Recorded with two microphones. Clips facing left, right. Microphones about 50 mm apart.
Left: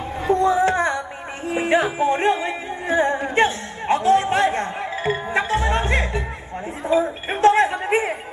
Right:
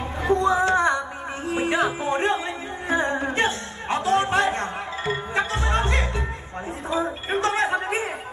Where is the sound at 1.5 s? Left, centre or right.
Left.